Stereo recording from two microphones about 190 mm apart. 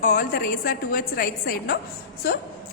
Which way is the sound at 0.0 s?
45° left (ahead or behind).